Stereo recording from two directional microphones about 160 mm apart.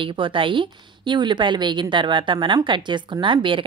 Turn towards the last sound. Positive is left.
turn(degrees=-30)  # may be behind; listen again after turning